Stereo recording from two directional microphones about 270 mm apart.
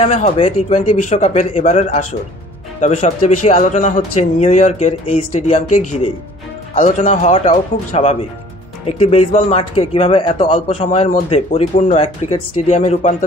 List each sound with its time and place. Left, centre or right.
0.0 s speech: left